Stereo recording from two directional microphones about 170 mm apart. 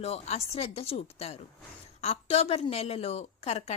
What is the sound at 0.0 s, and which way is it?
A woman's voice, 35° left (ahead or behind).